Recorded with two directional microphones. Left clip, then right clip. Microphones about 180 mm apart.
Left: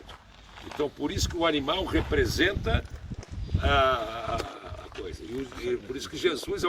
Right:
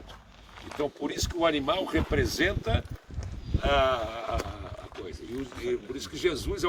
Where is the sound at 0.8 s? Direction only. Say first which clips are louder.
Left 1 dB; 30° right (ahead or behind).